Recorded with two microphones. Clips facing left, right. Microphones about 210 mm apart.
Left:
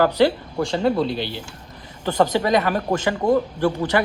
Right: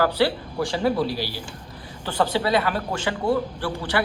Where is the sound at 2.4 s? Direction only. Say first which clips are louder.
Left 3 dB; 45° left (ahead or behind).